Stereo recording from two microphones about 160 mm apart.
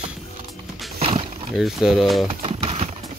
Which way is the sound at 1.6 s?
5° right (ahead or behind).